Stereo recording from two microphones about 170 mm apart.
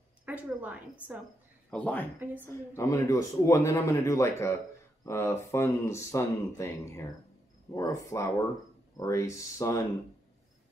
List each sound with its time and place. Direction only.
0.2 s a woman's voice: 10° right (ahead or behind)
1.7 s speech: 5° left (ahead or behind)
2.4 s speech: 15° left (ahead or behind)